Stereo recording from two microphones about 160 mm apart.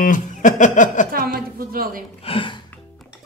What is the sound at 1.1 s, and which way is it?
Speech, 65° right (ahead or behind).